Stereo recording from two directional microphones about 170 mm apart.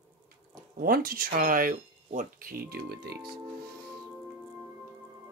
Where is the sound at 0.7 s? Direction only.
60° right (ahead or behind).